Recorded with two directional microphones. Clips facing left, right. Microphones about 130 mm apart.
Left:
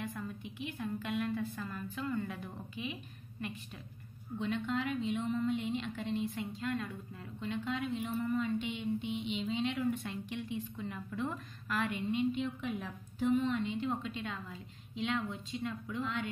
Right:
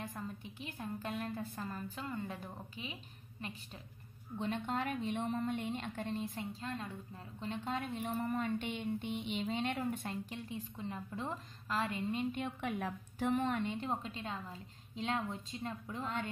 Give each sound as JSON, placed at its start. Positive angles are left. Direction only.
{"t": 0.0, "sound": "a sound", "side_deg": -35}
{"t": 2.2, "sound": "a woman's voice", "side_deg": -35}
{"t": 4.4, "sound": "speech", "side_deg": -40}
{"t": 6.6, "sound": "a woman's voice", "side_deg": -30}
{"t": 7.3, "sound": "speech", "side_deg": -40}
{"t": 13.8, "sound": "a woman's voice", "side_deg": -35}